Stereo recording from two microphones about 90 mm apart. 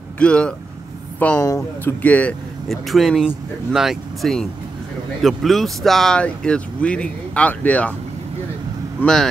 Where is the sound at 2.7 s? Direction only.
Centre (ahead or behind); by 7.9 s 15° left (ahead or behind).